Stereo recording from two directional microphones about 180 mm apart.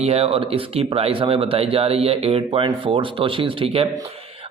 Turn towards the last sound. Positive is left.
turn(degrees=-30)  # may be behind; listen again after turning